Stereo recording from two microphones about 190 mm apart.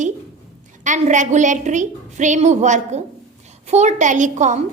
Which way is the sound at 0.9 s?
40° right (ahead or behind).